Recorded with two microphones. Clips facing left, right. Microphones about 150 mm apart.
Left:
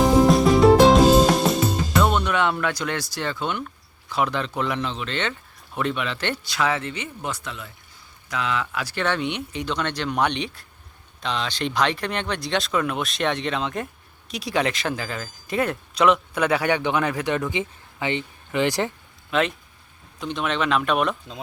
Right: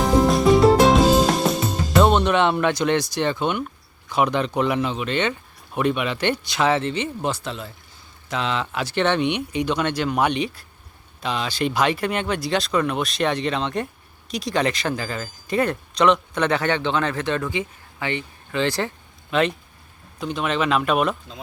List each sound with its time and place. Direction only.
0.0 s music: centre (ahead or behind)
2.0 s speech: 30° right (ahead or behind); by 18.9 s 15° left (ahead or behind)
19.3 s speech: centre (ahead or behind)